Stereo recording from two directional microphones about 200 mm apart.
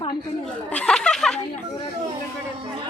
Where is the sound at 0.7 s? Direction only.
5° left (ahead or behind).